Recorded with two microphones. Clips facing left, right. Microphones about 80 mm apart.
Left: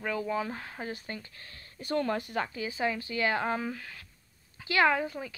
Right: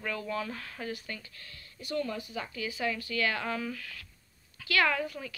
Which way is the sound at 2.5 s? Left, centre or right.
Left.